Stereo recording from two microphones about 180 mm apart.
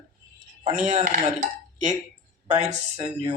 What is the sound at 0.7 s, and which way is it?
Speech, 45° right (ahead or behind).